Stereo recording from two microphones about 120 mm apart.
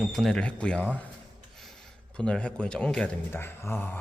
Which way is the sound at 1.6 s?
5° left (ahead or behind).